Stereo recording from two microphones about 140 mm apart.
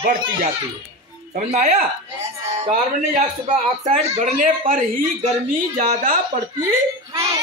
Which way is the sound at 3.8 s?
55° right (ahead or behind).